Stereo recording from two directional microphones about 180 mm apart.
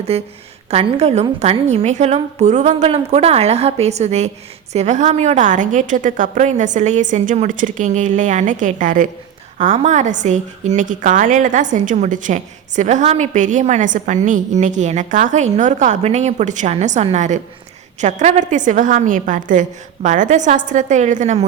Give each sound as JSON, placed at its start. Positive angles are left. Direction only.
{"t": 0.1, "sound": "a woman's voice", "side_deg": -35}